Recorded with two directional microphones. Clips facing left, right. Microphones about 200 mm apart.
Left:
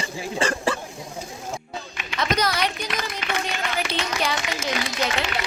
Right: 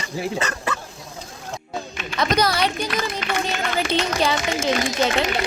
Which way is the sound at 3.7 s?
30° right (ahead or behind).